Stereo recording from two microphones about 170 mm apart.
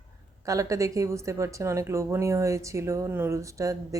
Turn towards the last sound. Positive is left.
turn(degrees=-20)  # may be behind; listen again after turning